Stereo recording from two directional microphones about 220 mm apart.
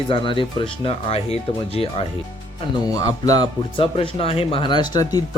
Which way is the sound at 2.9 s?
15° left (ahead or behind).